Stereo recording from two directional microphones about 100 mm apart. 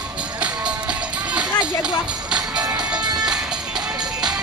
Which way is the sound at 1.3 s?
10° right (ahead or behind).